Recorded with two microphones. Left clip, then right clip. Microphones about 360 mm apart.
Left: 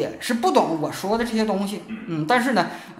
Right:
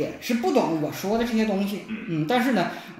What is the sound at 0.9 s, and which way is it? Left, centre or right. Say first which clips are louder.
Speech: left 2 dB; left.